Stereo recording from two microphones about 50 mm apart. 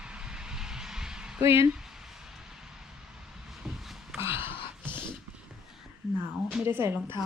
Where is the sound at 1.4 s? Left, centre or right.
Right.